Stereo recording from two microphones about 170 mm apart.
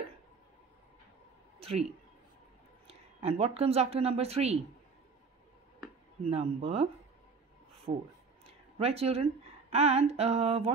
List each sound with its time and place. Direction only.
1.6 s a sound: 35° right (ahead or behind)
2.9 s a woman's voice: 35° right (ahead or behind)
6.2 s speech: 35° right (ahead or behind)
7.9 s speech: 50° right (ahead or behind)
8.5 s a woman's voice: 35° right (ahead or behind)